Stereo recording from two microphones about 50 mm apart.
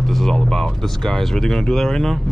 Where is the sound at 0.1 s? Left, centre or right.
Centre.